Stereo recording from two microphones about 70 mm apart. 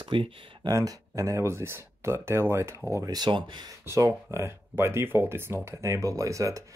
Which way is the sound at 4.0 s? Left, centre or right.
Right.